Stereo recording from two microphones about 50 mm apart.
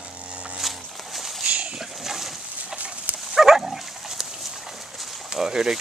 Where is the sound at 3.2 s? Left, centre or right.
Centre.